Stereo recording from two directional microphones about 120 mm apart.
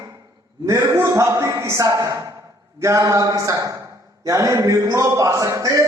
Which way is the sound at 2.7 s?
25° right (ahead or behind).